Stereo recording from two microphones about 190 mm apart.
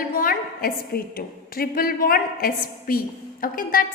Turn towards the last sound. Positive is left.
turn(degrees=50)  # may be behind; listen again after turning